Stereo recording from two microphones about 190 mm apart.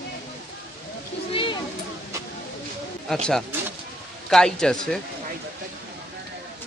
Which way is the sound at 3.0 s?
5° left (ahead or behind).